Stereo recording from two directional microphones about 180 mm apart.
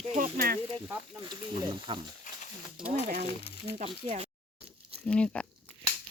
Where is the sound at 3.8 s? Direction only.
35° right (ahead or behind).